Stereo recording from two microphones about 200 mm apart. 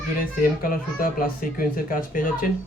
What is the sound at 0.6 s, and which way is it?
Speech, 45° left (ahead or behind).